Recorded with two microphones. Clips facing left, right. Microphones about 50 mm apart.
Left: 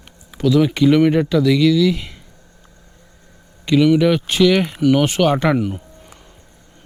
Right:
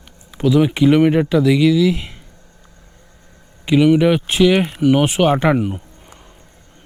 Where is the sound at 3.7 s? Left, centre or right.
Centre.